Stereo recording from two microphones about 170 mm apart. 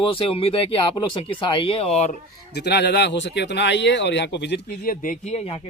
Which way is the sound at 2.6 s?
75° left (ahead or behind).